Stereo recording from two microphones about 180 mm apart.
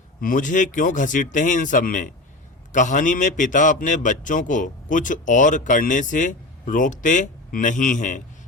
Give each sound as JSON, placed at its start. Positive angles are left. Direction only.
{"t": 0.2, "sound": "a man's voice", "side_deg": 50}